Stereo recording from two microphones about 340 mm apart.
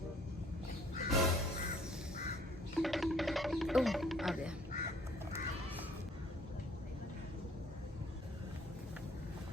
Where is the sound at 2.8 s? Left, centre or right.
Centre.